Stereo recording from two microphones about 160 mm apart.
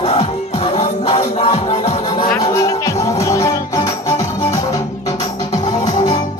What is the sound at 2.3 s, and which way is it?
Music, 20° left (ahead or behind).